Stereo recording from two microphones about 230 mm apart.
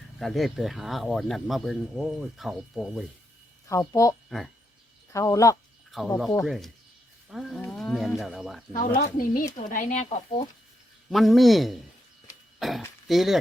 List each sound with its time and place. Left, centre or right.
0.2 s speech: centre
3.7 s speech: centre
4.3 s speech: centre
5.1 s speech: centre
6.1 s speech: centre
8.7 s speech: left
11.1 s speech: centre